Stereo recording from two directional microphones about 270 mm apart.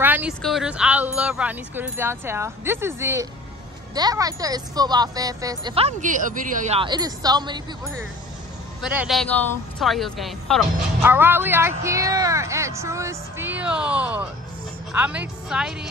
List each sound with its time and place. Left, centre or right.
0.0 s a woman's voice: centre
8.8 s a woman's voice: centre